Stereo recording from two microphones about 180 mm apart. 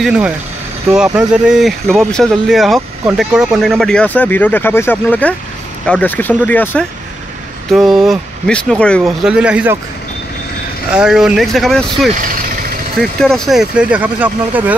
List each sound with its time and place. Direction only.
0.0 s speech: 5° right (ahead or behind)
7.7 s speech: centre (ahead or behind)
10.9 s speech: 5° right (ahead or behind)
12.1 s speech: 50° right (ahead or behind)
13.2 s speech: centre (ahead or behind)